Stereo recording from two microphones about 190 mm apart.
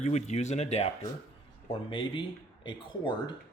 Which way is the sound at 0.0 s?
35° left (ahead or behind).